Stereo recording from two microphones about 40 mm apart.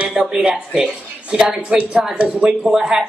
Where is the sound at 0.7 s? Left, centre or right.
Centre.